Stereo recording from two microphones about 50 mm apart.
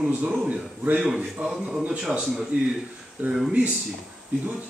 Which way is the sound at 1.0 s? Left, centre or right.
Centre.